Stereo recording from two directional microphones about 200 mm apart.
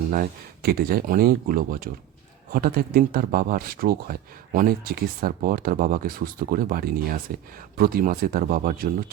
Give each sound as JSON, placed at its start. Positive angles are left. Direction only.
{"t": 0.1, "sound": "speech", "side_deg": -45}